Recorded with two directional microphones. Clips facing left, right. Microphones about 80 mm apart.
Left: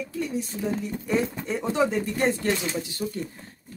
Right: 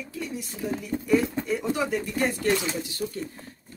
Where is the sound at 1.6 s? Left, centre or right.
Left.